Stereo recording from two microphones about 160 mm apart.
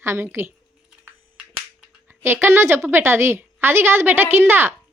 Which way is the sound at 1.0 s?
10° right (ahead or behind).